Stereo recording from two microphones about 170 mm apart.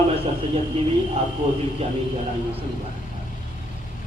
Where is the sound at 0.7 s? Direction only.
35° right (ahead or behind).